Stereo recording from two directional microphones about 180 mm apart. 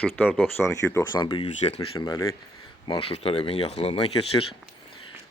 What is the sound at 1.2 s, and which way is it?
Speech, 25° left (ahead or behind).